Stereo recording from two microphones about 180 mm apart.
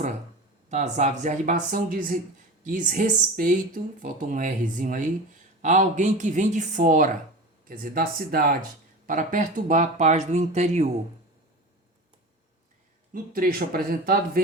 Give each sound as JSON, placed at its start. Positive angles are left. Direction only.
{"t": 0.7, "sound": "speech", "side_deg": -40}
{"t": 13.1, "sound": "speech", "side_deg": -55}